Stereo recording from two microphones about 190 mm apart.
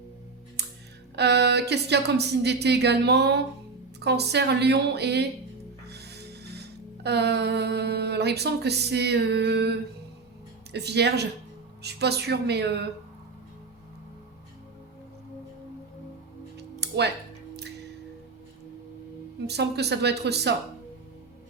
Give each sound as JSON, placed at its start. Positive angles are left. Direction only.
{"t": 0.6, "sound": "music", "side_deg": -60}
{"t": 1.1, "sound": "speech", "side_deg": -60}
{"t": 5.9, "sound": "music", "side_deg": -60}
{"t": 10.7, "sound": "speech", "side_deg": -60}
{"t": 16.6, "sound": "music", "side_deg": -60}
{"t": 19.5, "sound": "speech", "side_deg": -60}